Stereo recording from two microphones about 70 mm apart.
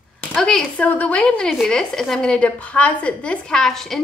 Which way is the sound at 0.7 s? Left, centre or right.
Left.